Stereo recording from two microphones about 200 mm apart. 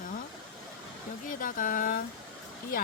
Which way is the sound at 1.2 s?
45° left (ahead or behind).